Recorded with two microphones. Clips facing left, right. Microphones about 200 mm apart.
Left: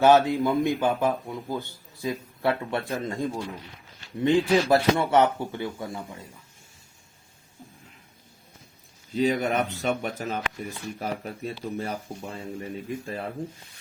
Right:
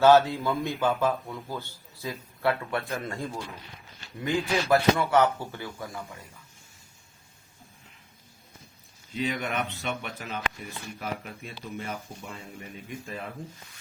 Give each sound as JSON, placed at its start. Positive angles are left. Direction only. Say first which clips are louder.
{"t": 0.0, "sound": "speech", "louder": "left 1 dB", "side_deg": 15}
{"t": 4.2, "sound": "speech", "louder": "left 7 dB", "side_deg": 30}
{"t": 5.1, "sound": "speech", "louder": "left 2 dB", "side_deg": 20}
{"t": 9.1, "sound": "speech", "louder": "left 6 dB", "side_deg": 40}